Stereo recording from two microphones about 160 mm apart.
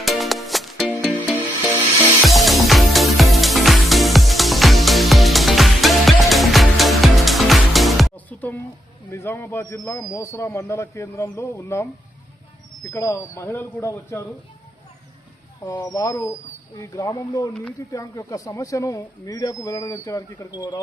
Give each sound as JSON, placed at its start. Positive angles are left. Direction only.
{"t": 0.0, "sound": "music", "side_deg": 0}
{"t": 8.4, "sound": "a sound", "side_deg": 10}
{"t": 9.0, "sound": "speech", "side_deg": 15}
{"t": 15.6, "sound": "speech", "side_deg": 20}